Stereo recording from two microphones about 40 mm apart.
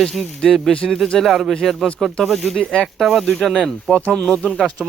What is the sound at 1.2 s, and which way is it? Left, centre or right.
Speech, centre.